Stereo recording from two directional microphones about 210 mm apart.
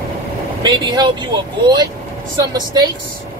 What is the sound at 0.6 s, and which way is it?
Speech, 20° right (ahead or behind).